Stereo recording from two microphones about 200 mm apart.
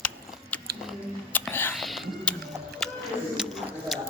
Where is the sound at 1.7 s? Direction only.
Centre (ahead or behind).